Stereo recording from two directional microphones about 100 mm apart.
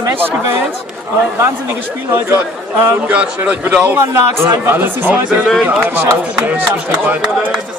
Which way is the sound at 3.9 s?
25° right (ahead or behind).